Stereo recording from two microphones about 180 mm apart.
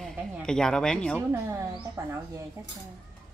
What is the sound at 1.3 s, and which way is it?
Speech, 15° right (ahead or behind).